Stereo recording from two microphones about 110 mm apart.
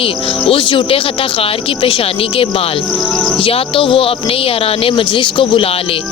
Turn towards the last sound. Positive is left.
turn(degrees=50)  # may be behind; listen again after turning